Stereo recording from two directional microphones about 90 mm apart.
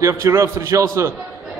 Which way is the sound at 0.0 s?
35° right (ahead or behind).